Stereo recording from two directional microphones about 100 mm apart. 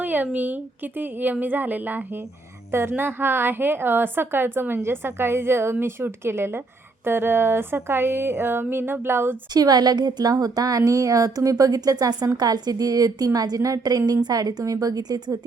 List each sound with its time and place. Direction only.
0.0 s a woman's voice: 15° right (ahead or behind)
9.5 s a woman's voice: 40° right (ahead or behind)